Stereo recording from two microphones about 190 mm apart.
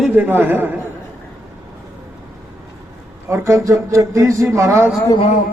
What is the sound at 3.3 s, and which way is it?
Speech, 15° right (ahead or behind).